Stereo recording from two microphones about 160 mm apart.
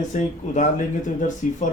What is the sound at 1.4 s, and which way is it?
Speech, 50° left (ahead or behind).